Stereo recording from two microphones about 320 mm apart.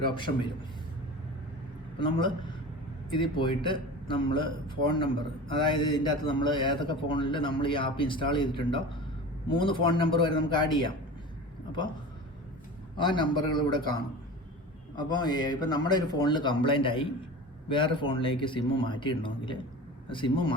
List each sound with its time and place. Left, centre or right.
0.0 s a man's voice: centre
2.0 s a man's voice: centre
5.5 s a man's voice: centre
13.1 s a man's voice: centre